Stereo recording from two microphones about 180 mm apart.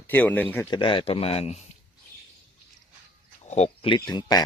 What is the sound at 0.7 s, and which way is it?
Speech, 25° left (ahead or behind).